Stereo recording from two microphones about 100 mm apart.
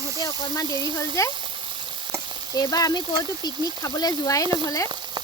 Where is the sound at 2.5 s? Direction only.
40° left (ahead or behind).